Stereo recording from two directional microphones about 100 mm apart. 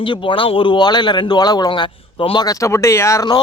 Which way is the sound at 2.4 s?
30° left (ahead or behind).